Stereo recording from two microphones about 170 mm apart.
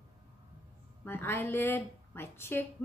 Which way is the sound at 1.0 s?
10° left (ahead or behind).